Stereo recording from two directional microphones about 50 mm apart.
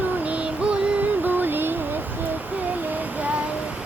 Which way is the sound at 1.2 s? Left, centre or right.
Right.